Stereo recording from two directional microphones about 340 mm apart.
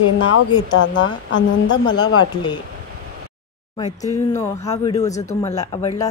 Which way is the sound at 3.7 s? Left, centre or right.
Centre.